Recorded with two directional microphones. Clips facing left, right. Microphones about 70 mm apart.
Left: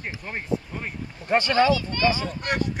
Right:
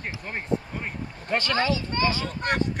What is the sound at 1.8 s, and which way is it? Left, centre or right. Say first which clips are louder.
Speech: right 2 dB; right.